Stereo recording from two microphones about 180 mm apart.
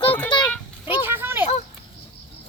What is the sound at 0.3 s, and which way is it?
Children playing, 25° left (ahead or behind).